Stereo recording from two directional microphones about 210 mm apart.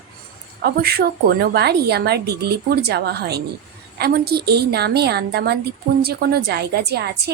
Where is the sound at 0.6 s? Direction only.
50° right (ahead or behind).